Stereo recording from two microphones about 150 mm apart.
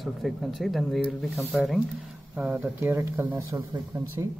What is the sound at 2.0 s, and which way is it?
A man's voice, 10° right (ahead or behind).